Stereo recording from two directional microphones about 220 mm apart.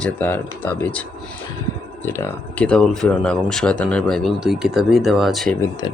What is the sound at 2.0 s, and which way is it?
Speech, 10° left (ahead or behind).